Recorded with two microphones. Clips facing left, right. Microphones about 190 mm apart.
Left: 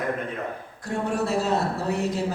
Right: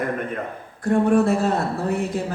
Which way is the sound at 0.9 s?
55° right (ahead or behind).